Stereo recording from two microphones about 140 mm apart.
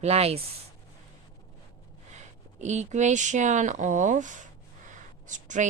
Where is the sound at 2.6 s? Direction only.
55° right (ahead or behind).